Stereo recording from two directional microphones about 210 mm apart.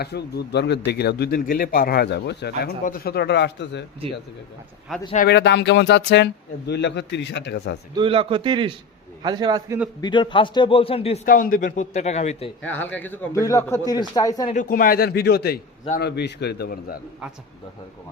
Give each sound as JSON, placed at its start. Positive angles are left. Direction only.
{"t": 0.0, "sound": "a man's voice", "side_deg": 50}
{"t": 5.1, "sound": "speech", "side_deg": 50}
{"t": 7.9, "sound": "a man's voice", "side_deg": -25}
{"t": 10.0, "sound": "a man's voice", "side_deg": 20}
{"t": 11.3, "sound": "a man's voice", "side_deg": 40}
{"t": 12.6, "sound": "a man's voice", "side_deg": 10}
{"t": 14.5, "sound": "a man's voice", "side_deg": 40}